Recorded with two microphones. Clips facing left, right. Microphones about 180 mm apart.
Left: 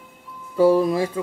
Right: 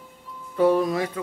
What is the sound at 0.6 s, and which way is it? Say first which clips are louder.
Speech: left 3 dB; 30° left (ahead or behind).